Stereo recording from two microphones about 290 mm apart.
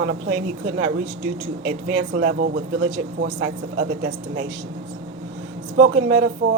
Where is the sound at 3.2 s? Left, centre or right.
Right.